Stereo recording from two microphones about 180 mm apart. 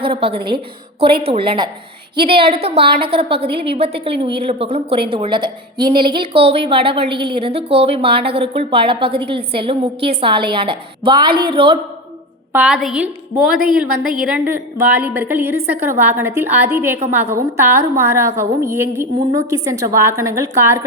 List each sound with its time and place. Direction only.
0.0 s a woman's voice: 30° right (ahead or behind)
12.5 s a woman's voice: 5° right (ahead or behind)